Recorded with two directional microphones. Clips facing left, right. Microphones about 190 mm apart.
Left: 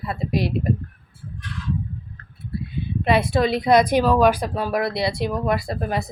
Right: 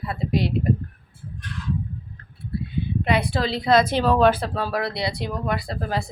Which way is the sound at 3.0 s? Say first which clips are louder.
Left 5 dB; 25° left (ahead or behind).